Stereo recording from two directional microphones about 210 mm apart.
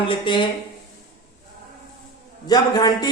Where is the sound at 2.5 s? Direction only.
20° left (ahead or behind).